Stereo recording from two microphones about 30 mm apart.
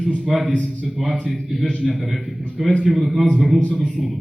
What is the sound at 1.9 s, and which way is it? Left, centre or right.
Speech, centre.